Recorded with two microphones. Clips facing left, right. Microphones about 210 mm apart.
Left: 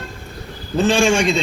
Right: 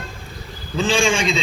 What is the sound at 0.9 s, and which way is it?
Speech, 65° left (ahead or behind).